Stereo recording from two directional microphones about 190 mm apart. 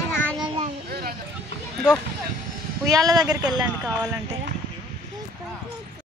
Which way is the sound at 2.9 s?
20° right (ahead or behind).